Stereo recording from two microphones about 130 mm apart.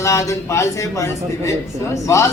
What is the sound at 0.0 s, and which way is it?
A man's voice, 25° left (ahead or behind).